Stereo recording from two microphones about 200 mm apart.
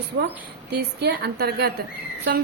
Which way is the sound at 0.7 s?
55° right (ahead or behind).